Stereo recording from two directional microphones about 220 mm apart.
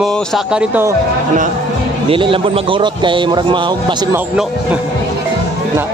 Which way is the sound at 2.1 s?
25° right (ahead or behind).